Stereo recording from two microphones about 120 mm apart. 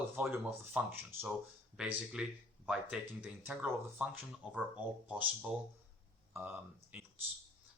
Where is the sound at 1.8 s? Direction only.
5° right (ahead or behind).